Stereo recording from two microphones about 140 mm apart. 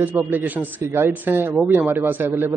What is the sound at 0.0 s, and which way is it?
Speech, 15° right (ahead or behind).